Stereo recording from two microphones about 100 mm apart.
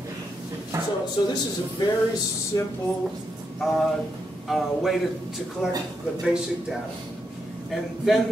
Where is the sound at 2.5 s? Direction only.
40° left (ahead or behind).